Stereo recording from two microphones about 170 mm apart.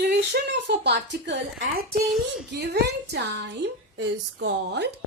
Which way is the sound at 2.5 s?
80° right.